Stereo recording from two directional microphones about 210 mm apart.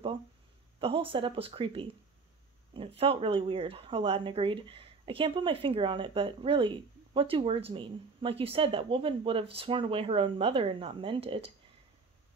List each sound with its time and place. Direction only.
0.7 s speech: 25° right (ahead or behind)